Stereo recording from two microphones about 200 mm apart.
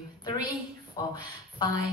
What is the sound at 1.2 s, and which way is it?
Speech, 20° left (ahead or behind).